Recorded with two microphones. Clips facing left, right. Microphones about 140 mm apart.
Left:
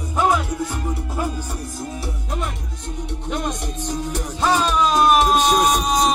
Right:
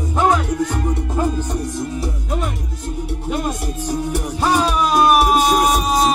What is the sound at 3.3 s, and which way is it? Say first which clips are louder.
Music: right 3 dB; 5° right (ahead or behind).